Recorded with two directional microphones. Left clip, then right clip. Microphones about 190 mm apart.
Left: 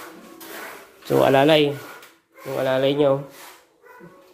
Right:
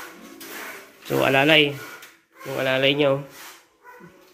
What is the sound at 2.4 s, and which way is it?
Speech, 5° left (ahead or behind).